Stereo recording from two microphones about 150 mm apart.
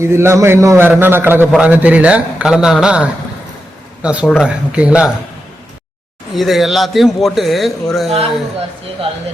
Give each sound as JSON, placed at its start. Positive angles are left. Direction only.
{"t": 0.0, "sound": "a man's voice", "side_deg": -15}
{"t": 6.3, "sound": "a man's voice", "side_deg": 0}